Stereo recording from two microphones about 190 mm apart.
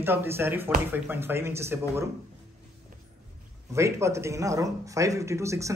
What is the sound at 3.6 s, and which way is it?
A man's voice, 15° right (ahead or behind).